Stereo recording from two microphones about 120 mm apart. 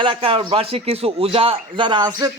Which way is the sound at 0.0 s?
50° right (ahead or behind).